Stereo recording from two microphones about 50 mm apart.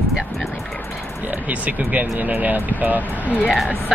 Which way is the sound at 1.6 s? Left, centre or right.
Right.